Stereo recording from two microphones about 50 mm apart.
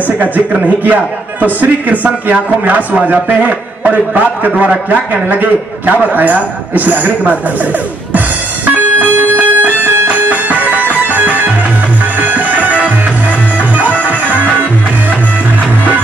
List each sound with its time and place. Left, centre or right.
0.0 s a man's voice: right
8.6 s music: right
14.0 s music: right